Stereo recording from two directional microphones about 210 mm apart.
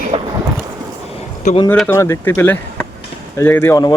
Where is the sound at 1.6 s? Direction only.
10° left (ahead or behind).